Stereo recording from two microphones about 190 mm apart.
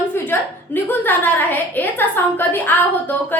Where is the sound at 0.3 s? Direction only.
10° left (ahead or behind).